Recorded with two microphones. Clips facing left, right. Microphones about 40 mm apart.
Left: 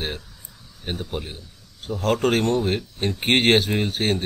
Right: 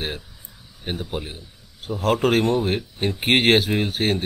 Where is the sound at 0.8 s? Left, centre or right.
Centre.